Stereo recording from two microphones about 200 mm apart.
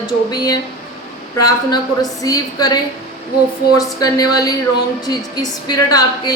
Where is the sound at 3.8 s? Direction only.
20° left (ahead or behind).